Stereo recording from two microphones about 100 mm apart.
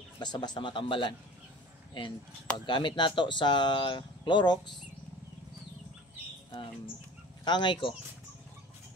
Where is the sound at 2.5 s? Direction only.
50° left (ahead or behind).